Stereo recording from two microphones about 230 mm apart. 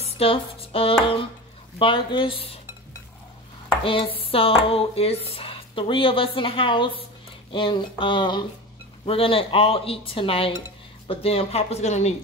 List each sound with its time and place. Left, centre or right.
0.2 s dishes: left
3.8 s dishes: left